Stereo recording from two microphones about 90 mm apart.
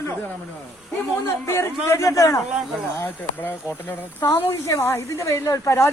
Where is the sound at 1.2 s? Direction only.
30° left (ahead or behind).